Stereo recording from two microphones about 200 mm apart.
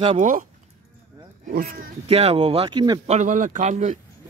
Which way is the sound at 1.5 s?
35° right (ahead or behind).